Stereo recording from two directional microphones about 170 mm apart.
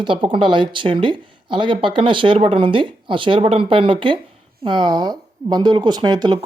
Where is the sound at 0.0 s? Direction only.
30° right (ahead or behind).